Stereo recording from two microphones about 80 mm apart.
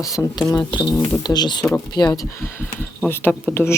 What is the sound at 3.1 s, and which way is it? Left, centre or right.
Speech, left.